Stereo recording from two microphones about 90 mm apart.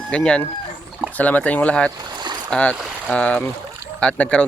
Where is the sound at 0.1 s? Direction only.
10° left (ahead or behind).